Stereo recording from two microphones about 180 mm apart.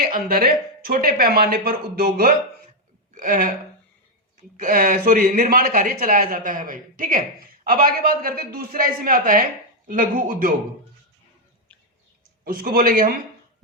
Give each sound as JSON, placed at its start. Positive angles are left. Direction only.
{"t": 0.0, "sound": "speech", "side_deg": -55}
{"t": 12.5, "sound": "speech", "side_deg": -50}